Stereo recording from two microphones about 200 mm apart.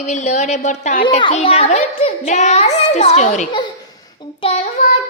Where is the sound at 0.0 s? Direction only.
35° left (ahead or behind).